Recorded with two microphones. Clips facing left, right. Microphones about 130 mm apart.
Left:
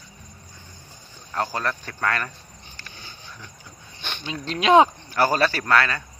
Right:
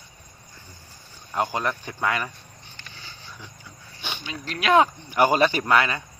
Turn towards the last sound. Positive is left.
turn(degrees=-15)  # may be behind; listen again after turning